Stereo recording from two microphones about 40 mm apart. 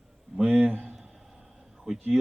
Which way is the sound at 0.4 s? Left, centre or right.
Right.